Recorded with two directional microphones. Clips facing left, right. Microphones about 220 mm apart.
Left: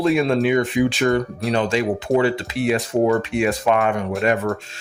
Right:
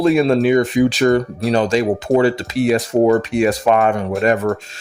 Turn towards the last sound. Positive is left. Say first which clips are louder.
# right 4 dB
turn(degrees=-40)  # may be behind; listen again after turning